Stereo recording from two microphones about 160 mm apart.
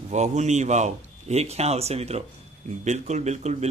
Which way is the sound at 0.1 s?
45° right (ahead or behind).